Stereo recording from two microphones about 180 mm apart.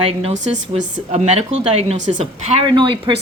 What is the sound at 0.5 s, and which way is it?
A woman's voice, 45° right (ahead or behind).